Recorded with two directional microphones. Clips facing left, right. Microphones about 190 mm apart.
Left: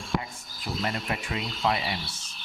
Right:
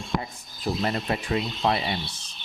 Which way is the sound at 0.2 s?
35° right (ahead or behind).